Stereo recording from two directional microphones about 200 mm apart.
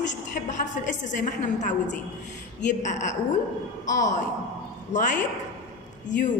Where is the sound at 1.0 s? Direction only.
40° left (ahead or behind).